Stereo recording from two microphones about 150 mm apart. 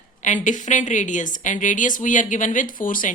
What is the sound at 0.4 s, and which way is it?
A woman's voice, 55° left (ahead or behind).